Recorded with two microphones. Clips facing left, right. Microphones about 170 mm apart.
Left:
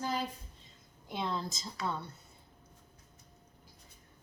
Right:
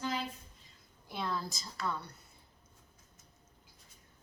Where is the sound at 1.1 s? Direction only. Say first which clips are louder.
Left 1 dB; 20° left (ahead or behind).